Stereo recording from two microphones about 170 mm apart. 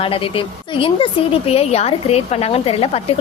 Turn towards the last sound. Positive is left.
turn(degrees=35)  # may be behind; listen again after turning